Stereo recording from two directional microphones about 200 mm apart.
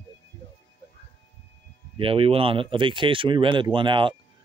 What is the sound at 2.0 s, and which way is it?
Speech, 25° right (ahead or behind).